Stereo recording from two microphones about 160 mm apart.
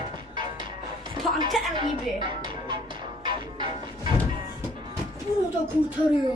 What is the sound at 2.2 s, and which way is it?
Music, 30° right (ahead or behind).